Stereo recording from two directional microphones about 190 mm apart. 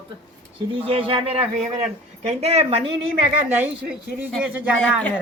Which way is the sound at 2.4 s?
35° right (ahead or behind).